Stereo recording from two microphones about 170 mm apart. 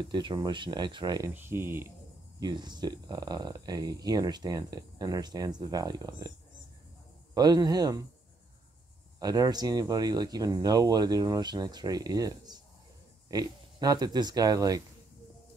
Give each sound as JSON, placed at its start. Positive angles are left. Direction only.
{"t": 0.0, "sound": "speech", "side_deg": -25}
{"t": 1.3, "sound": "speech", "side_deg": -15}
{"t": 2.4, "sound": "speech", "side_deg": -25}
{"t": 7.3, "sound": "speech", "side_deg": -25}
{"t": 9.2, "sound": "speech", "side_deg": -20}